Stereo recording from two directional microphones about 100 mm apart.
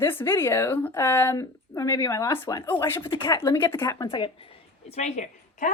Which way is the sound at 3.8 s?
45° left (ahead or behind).